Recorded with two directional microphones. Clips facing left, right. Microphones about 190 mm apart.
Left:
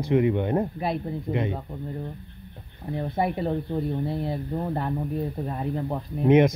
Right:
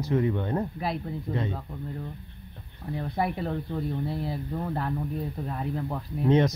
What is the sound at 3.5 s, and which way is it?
Speech, 25° left (ahead or behind).